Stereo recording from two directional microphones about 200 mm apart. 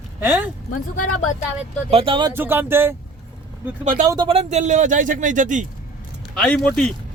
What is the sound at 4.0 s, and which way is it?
Speech, 20° right (ahead or behind).